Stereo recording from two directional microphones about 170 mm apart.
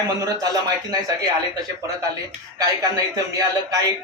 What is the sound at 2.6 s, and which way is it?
Speech, 20° right (ahead or behind).